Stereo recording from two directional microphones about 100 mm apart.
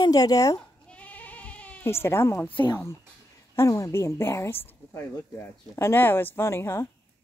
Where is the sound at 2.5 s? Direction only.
20° left (ahead or behind).